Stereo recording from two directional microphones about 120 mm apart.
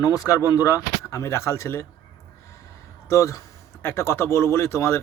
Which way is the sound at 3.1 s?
25° left (ahead or behind).